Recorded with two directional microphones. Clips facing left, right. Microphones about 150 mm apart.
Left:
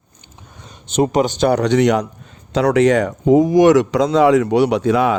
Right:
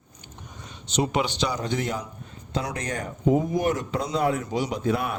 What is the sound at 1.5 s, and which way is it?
Speech, 75° left (ahead or behind).